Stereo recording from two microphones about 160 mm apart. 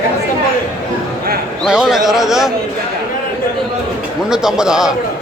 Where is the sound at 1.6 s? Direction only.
5° right (ahead or behind).